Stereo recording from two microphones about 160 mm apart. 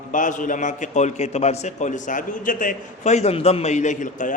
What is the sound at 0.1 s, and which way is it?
A man's voice, 55° left (ahead or behind).